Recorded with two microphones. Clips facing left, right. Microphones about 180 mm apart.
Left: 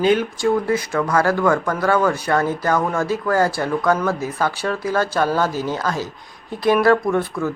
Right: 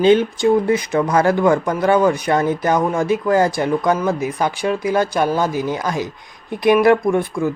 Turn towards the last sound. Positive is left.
turn(degrees=-15)  # may be behind; listen again after turning